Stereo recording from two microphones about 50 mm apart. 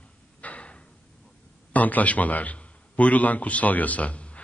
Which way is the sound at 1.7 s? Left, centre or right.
Left.